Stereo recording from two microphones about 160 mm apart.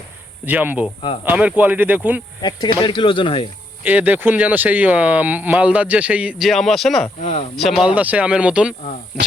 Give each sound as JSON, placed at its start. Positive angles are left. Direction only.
{"t": 0.4, "sound": "speech", "side_deg": -10}
{"t": 2.4, "sound": "speech", "side_deg": 25}
{"t": 3.8, "sound": "speech", "side_deg": -10}
{"t": 7.2, "sound": "speech", "side_deg": 45}
{"t": 7.5, "sound": "speech", "side_deg": 0}